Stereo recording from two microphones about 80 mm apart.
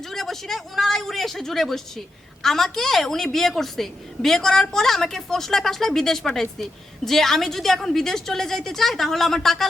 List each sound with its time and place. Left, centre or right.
0.0 s a woman's voice: centre